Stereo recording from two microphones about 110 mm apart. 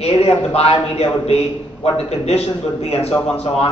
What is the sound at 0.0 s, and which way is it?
A man's voice, 70° left (ahead or behind).